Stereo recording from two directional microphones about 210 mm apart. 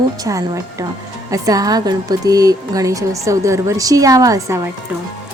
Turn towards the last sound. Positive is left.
turn(degrees=-15)  # may be behind; listen again after turning